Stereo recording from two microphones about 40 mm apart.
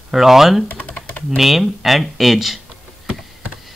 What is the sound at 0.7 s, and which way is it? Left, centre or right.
Typing, left.